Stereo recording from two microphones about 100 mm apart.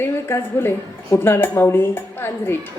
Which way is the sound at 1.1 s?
25° left (ahead or behind).